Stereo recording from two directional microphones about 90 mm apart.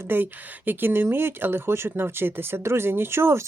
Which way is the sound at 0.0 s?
20° right (ahead or behind).